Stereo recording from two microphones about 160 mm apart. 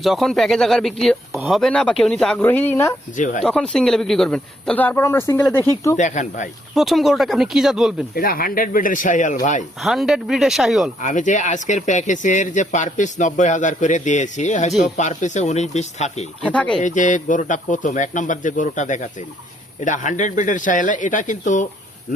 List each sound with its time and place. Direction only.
0.0 s speech: centre (ahead or behind)
3.2 s speech: 50° left (ahead or behind)
3.4 s speech: 5° left (ahead or behind)
6.0 s speech: 50° left (ahead or behind)
6.7 s speech: centre (ahead or behind)
8.1 s speech: 65° left (ahead or behind); by 9.6 s 50° left (ahead or behind)
9.8 s speech: centre (ahead or behind)
11.0 s speech: 50° left (ahead or behind)
16.4 s speech: 5° left (ahead or behind)
16.8 s speech: 50° left (ahead or behind)